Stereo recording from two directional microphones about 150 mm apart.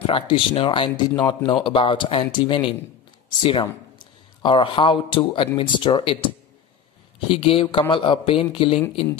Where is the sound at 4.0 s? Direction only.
35° left (ahead or behind).